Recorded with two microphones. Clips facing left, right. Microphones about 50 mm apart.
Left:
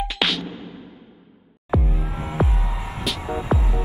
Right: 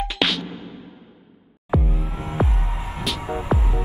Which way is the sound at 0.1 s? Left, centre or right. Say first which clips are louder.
Right 2 dB; centre.